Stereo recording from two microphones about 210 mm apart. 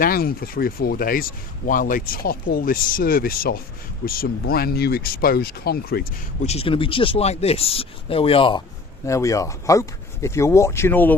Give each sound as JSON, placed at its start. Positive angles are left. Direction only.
{"t": 0.0, "sound": "speech", "side_deg": 45}
{"t": 6.4, "sound": "speech", "side_deg": 30}